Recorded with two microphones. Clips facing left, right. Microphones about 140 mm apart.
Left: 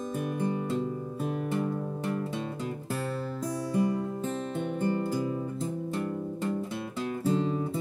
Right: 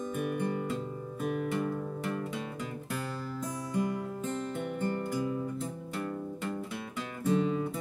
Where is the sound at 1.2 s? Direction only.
30° left (ahead or behind).